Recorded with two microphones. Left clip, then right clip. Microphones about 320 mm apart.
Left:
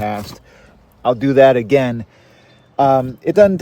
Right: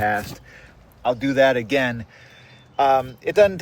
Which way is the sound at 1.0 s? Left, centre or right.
Left.